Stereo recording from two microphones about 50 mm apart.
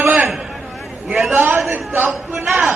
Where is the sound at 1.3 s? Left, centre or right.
Right.